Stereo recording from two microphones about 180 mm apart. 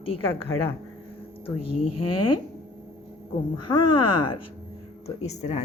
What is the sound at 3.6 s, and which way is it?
A woman's voice, 30° left (ahead or behind).